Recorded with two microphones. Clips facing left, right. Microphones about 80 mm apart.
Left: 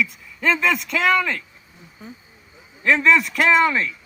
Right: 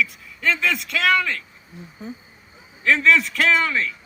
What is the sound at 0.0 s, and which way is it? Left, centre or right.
A man's voice, centre.